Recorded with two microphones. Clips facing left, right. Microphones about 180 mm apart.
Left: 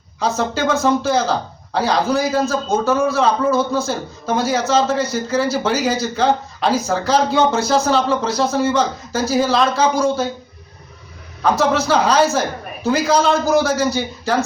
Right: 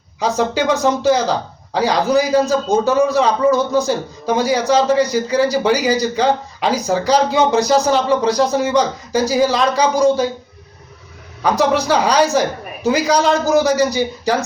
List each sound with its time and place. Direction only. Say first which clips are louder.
0.2 s a man's voice: right 2 dB; 15° right (ahead or behind)
11.5 s a man's voice: right 2 dB; 15° right (ahead or behind)